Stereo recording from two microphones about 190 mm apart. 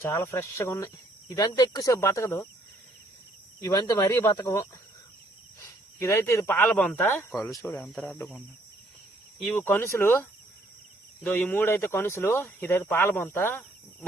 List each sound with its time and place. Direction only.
0.0 s speech: 15° left (ahead or behind)
3.6 s speech: 20° left (ahead or behind)
9.4 s speech: 10° left (ahead or behind)